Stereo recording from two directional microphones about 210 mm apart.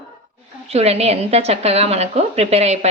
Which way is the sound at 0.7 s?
30° right (ahead or behind).